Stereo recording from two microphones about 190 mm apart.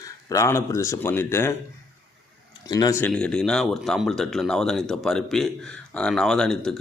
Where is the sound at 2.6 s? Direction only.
20° left (ahead or behind).